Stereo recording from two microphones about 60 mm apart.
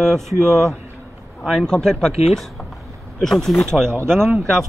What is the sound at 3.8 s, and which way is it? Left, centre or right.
Speech, right.